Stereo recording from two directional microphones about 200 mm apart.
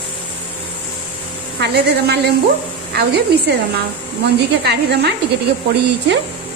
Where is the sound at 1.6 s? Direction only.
55° right (ahead or behind).